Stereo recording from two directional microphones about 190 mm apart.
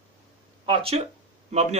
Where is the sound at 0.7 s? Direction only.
30° right (ahead or behind).